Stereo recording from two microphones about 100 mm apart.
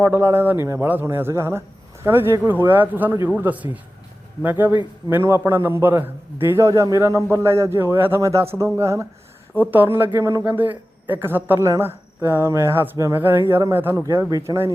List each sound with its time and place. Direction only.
0.1 s a man's voice: 25° right (ahead or behind)
10.2 s a man's voice: 30° right (ahead or behind)
10.4 s a man's voice: 20° right (ahead or behind)